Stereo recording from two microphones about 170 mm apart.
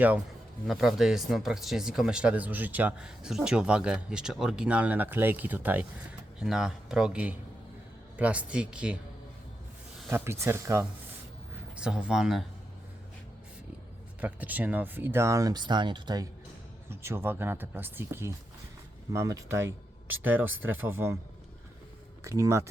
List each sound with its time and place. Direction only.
0.7 s speech: centre (ahead or behind)
10.1 s speech: 15° right (ahead or behind)
11.8 s speech: 5° right (ahead or behind)
14.2 s speech: 10° right (ahead or behind); by 16.2 s 25° right (ahead or behind)
16.9 s speech: 15° right (ahead or behind)
22.2 s speech: 15° right (ahead or behind)